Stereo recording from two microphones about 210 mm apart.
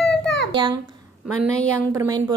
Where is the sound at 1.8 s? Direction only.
15° right (ahead or behind).